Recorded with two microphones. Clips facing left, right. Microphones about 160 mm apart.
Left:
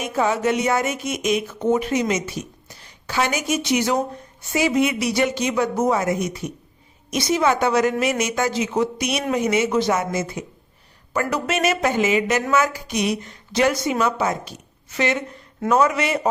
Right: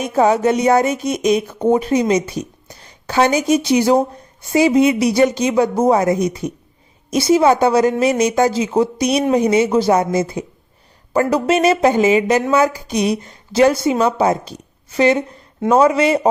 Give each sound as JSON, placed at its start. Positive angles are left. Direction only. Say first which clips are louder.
{"t": 0.1, "sound": "a woman's voice", "louder": "right 6 dB", "side_deg": -40}